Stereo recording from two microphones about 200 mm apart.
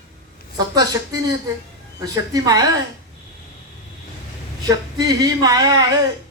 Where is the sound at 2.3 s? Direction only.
20° right (ahead or behind).